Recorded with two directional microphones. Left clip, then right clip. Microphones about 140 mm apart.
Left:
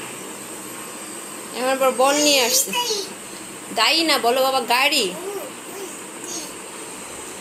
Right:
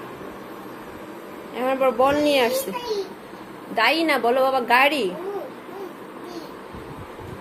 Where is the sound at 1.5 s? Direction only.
Centre (ahead or behind).